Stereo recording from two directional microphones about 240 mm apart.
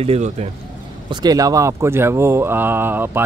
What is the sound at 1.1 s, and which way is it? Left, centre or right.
Speech, centre.